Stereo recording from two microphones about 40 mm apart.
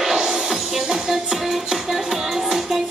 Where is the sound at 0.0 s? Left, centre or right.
Centre.